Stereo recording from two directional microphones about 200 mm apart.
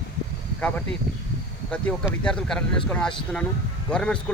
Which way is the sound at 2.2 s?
5° left (ahead or behind).